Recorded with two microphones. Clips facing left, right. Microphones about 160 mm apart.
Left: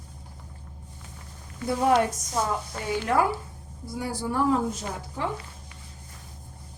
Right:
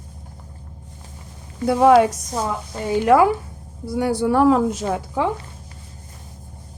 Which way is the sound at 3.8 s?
65° right (ahead or behind).